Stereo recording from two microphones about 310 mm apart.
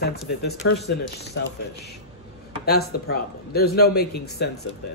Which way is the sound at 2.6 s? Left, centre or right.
Left.